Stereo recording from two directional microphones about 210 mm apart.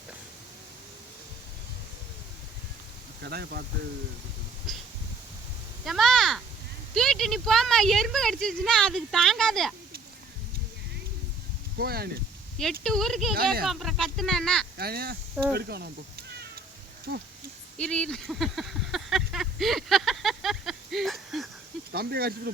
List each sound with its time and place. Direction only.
3.2 s speech: 50° right (ahead or behind)
5.8 s speech: centre (ahead or behind)
11.8 s speech: 45° right (ahead or behind)
12.8 s speech: centre (ahead or behind)
14.8 s speech: 45° right (ahead or behind)
17.1 s speech: 50° right (ahead or behind)
17.7 s a sound: 5° left (ahead or behind)
21.9 s speech: 45° right (ahead or behind)